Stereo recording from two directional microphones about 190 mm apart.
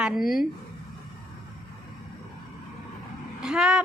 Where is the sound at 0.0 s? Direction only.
Centre (ahead or behind).